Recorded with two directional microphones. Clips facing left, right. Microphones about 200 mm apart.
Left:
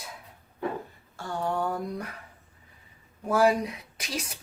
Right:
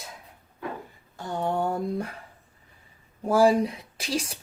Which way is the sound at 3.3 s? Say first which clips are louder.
Right 3 dB; 30° right (ahead or behind).